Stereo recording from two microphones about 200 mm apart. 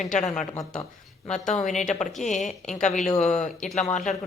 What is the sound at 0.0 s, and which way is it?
Speech, 35° left (ahead or behind).